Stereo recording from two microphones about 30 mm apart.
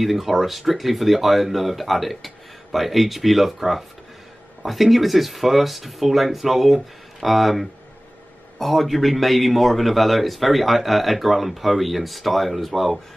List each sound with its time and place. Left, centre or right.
0.0 s a man's voice: centre